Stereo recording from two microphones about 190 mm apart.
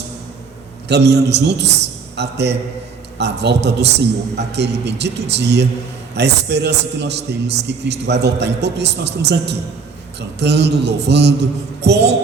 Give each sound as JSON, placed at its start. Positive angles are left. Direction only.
{"t": 0.9, "sound": "a man's voice", "side_deg": -60}